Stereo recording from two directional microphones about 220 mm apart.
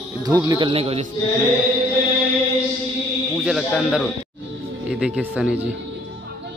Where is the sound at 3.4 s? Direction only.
Centre (ahead or behind).